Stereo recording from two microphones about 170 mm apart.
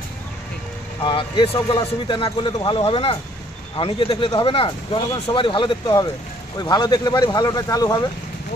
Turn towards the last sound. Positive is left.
turn(degrees=20)  # may be behind; listen again after turning